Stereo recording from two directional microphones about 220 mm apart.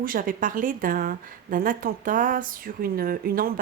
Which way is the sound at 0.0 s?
40° right (ahead or behind).